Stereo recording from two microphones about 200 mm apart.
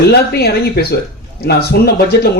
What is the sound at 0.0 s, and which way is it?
Speech, 55° left (ahead or behind).